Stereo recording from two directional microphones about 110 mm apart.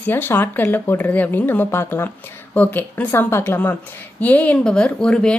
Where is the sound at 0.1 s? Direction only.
20° left (ahead or behind).